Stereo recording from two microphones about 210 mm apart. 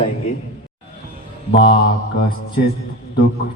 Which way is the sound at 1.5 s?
25° left (ahead or behind).